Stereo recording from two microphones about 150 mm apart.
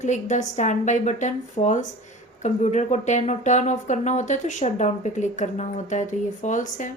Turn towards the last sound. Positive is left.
turn(degrees=60)  # may be behind; listen again after turning